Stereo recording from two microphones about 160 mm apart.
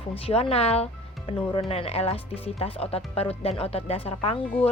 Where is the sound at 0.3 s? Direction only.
35° left (ahead or behind).